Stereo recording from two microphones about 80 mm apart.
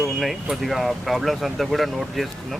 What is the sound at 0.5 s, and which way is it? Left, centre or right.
Speech, centre.